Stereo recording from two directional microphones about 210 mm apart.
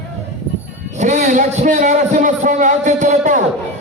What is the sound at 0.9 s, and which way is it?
A man's voice, 35° right (ahead or behind).